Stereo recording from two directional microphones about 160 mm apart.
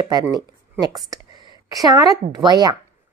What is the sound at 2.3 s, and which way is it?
Speech, 25° right (ahead or behind).